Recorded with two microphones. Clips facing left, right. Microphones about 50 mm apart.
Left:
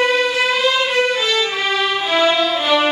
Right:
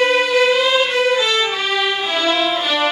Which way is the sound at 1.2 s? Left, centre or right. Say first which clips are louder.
Even; centre.